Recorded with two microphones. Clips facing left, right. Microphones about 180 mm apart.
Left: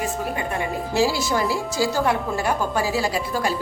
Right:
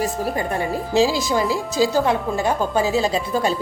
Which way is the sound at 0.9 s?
15° right (ahead or behind).